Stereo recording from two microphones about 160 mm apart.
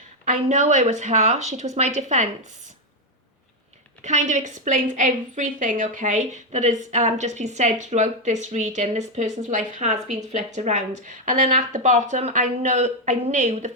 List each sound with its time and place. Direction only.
0.3 s speech: 45° right (ahead or behind)
4.0 s speech: 45° right (ahead or behind)